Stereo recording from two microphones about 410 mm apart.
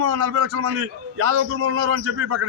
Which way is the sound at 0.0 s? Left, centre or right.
Right.